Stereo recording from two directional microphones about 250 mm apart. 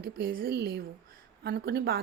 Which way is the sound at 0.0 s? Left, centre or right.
Right.